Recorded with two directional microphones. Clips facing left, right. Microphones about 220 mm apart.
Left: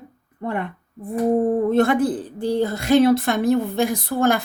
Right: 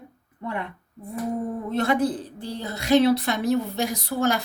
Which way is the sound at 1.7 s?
50° left (ahead or behind).